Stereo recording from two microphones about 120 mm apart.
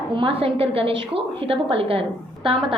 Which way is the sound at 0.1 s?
45° right (ahead or behind).